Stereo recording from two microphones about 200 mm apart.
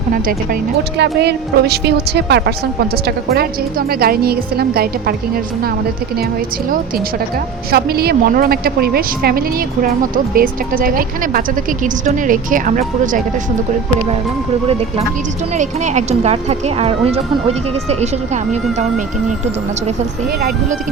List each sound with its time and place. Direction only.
0.9 s a woman's voice: 55° right (ahead or behind)
7.7 s a woman's voice: 50° right (ahead or behind)
15.5 s a woman's voice: 35° right (ahead or behind)